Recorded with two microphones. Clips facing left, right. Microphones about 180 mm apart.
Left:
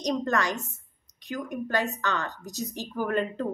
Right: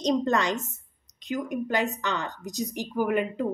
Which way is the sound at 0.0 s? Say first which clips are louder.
Right 3 dB; 25° right (ahead or behind).